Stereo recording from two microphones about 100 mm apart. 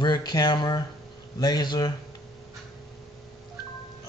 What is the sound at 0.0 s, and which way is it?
Speech, 45° left (ahead or behind).